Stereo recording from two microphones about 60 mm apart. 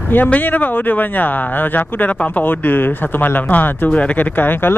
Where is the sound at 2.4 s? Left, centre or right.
Left.